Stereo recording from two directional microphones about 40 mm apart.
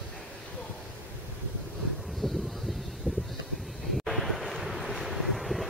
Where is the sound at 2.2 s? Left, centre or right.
Centre.